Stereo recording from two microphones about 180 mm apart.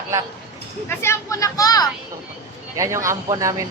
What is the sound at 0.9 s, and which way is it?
Speech, 15° left (ahead or behind).